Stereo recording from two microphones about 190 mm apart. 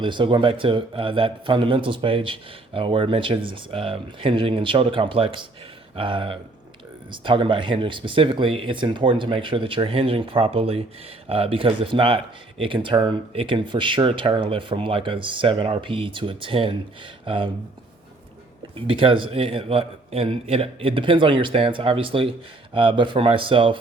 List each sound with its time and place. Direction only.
0.0 s speech: 25° right (ahead or behind)
18.9 s speech: 25° right (ahead or behind)